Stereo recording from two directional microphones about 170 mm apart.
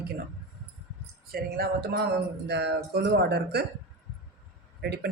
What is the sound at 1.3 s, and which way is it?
Speech, 65° right (ahead or behind).